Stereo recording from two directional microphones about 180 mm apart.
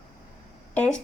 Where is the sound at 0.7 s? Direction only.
10° left (ahead or behind).